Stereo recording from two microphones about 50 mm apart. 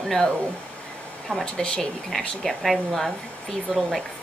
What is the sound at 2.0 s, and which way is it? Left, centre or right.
Speech, centre.